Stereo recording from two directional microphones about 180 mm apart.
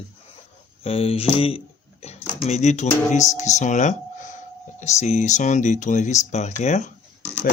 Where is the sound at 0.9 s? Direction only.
35° left (ahead or behind).